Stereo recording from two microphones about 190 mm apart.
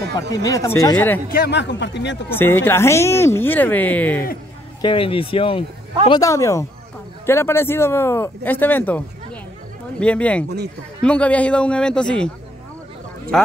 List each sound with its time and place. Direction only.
0.3 s speech: 20° left (ahead or behind)
1.3 s a man's voice: 60° left (ahead or behind)
2.2 s speech: 10° left (ahead or behind)
4.8 s a man's voice: 30° left (ahead or behind); by 12.3 s 5° left (ahead or behind)
13.3 s a man's voice: 5° left (ahead or behind)